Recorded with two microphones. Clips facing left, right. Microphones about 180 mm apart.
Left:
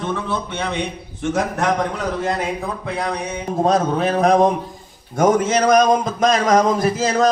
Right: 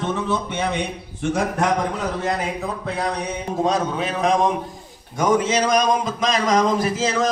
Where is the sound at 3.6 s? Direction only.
40° left (ahead or behind).